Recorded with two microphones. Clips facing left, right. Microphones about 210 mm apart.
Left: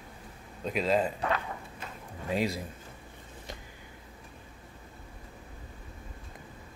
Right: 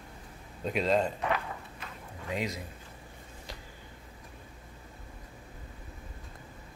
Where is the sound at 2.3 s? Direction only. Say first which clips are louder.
Left 4 dB; 30° left (ahead or behind).